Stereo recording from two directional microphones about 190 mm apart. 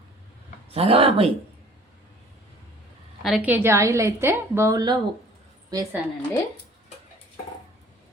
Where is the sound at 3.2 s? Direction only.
5° right (ahead or behind); by 5.0 s 20° right (ahead or behind).